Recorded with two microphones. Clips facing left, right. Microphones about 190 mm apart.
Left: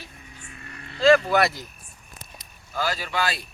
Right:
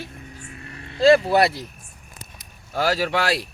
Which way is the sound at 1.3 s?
30° right (ahead or behind).